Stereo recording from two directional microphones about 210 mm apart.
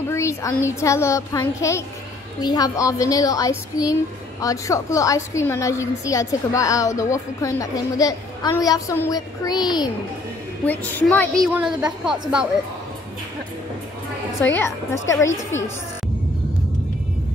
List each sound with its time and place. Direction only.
0.1 s a sound: 15° left (ahead or behind)
0.7 s a woman's voice: 15° left (ahead or behind)
10.6 s a woman's voice: 5° left (ahead or behind)
11.4 s a woman's voice: 5° right (ahead or behind)
14.4 s a woman's voice: 10° left (ahead or behind)